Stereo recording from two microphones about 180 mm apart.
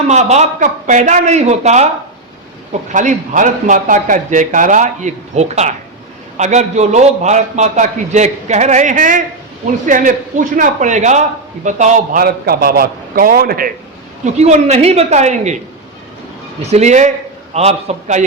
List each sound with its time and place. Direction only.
0.1 s a man's voice: 40° right (ahead or behind)
2.9 s a man's voice: 45° right (ahead or behind)
14.3 s a man's voice: 40° right (ahead or behind)
16.6 s a man's voice: 40° right (ahead or behind)